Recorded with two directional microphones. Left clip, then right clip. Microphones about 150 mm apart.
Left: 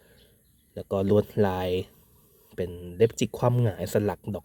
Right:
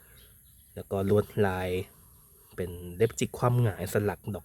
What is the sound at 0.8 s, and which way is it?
Speech, 20° left (ahead or behind).